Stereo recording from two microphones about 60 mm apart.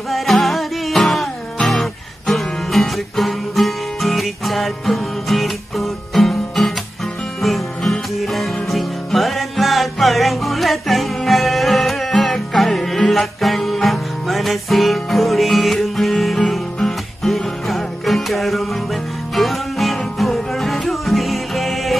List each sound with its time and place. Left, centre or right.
0.1 s music: centre